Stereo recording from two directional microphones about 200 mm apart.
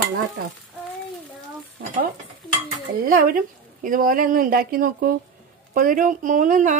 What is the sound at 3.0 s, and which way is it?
Speech, 45° right (ahead or behind).